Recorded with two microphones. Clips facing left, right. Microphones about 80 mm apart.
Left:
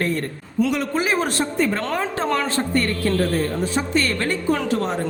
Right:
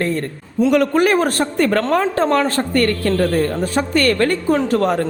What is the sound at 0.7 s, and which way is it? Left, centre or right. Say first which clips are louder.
A man's voice: right 8 dB; right.